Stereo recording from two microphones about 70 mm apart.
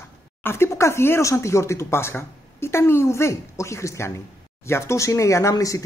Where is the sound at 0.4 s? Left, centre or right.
Left.